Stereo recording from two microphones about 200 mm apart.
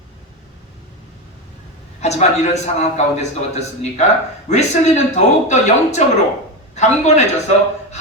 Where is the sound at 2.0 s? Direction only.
35° left (ahead or behind).